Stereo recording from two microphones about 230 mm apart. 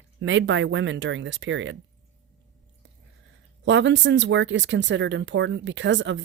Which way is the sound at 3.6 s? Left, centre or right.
Right.